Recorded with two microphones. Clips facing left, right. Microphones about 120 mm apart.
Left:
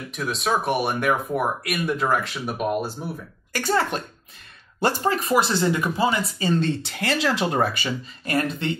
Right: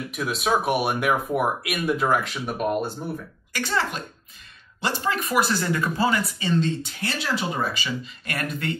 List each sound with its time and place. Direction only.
0.1 s speech: 5° right (ahead or behind)
3.5 s speech: 45° left (ahead or behind)
5.1 s speech: 30° left (ahead or behind)
6.6 s speech: 75° left (ahead or behind); by 7.9 s 60° left (ahead or behind)
8.3 s speech: 30° left (ahead or behind)